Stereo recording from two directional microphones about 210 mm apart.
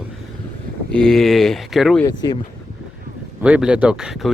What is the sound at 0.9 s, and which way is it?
Speech, 5° left (ahead or behind).